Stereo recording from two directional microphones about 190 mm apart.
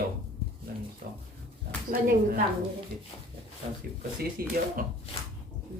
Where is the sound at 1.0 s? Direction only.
50° right (ahead or behind).